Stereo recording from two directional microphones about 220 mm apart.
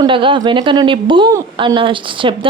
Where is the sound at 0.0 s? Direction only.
25° right (ahead or behind).